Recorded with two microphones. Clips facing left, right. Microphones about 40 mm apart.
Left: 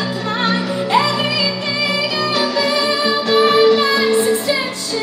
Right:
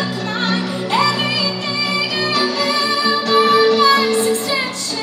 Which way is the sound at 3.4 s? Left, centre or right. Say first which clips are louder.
Even; centre.